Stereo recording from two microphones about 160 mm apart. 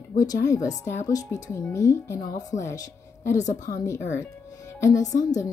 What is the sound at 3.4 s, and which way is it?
Speech, 55° left (ahead or behind).